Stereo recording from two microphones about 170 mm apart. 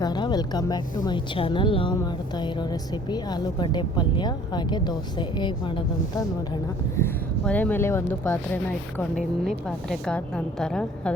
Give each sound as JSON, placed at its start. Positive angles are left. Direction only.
{"t": 0.0, "sound": "a woman's voice", "side_deg": 25}
{"t": 9.0, "sound": "a woman's voice", "side_deg": 0}